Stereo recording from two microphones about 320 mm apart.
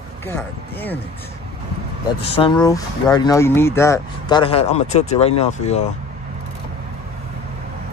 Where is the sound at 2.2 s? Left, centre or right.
Centre.